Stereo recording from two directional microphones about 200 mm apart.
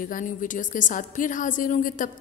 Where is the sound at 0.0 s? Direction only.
40° left (ahead or behind).